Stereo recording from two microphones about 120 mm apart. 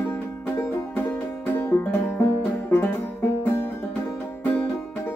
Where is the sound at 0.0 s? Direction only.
20° left (ahead or behind).